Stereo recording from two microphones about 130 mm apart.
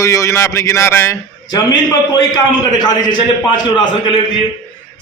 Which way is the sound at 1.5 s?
30° left (ahead or behind).